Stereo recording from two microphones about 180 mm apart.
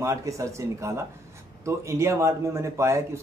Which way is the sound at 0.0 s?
15° right (ahead or behind).